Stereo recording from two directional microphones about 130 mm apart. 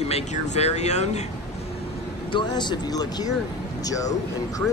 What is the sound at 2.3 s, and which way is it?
Speech, 35° left (ahead or behind).